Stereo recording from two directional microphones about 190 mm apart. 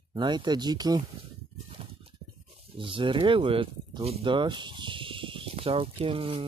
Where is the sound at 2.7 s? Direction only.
25° right (ahead or behind).